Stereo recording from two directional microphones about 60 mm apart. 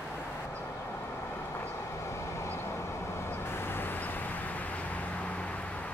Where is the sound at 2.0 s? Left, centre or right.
Left.